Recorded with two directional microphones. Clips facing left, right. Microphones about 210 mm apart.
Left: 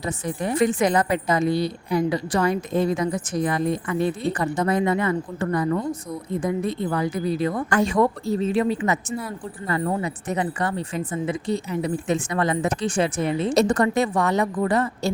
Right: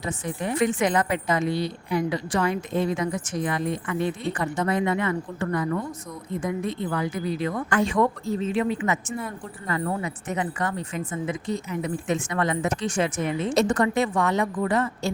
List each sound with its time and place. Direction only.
0.0 s a woman's voice: 40° left (ahead or behind)